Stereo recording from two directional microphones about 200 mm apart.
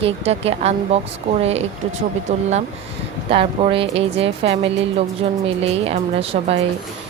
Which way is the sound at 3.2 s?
30° right (ahead or behind).